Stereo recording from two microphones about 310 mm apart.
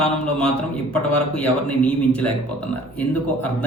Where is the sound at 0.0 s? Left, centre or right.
Centre.